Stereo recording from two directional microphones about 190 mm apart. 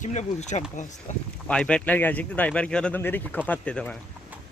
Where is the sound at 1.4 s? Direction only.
5° left (ahead or behind).